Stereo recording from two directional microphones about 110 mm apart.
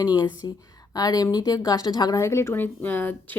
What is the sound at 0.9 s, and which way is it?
A woman's voice, 35° left (ahead or behind).